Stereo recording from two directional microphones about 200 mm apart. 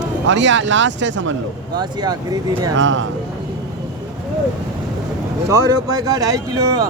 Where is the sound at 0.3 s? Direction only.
70° right (ahead or behind).